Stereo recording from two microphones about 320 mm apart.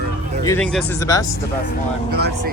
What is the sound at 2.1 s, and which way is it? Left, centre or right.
Speech, right.